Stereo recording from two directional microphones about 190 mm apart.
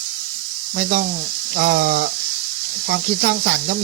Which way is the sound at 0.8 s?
50° right (ahead or behind).